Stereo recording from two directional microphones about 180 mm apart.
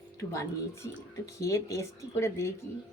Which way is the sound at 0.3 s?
15° left (ahead or behind).